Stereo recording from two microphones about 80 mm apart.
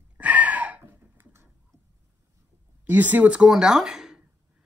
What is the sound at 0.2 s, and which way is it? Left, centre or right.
Gasp, centre.